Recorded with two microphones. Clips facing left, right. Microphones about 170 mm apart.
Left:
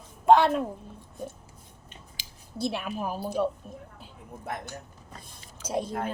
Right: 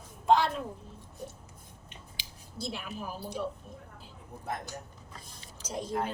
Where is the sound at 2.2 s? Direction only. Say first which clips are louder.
Left 9 dB; 60° left (ahead or behind).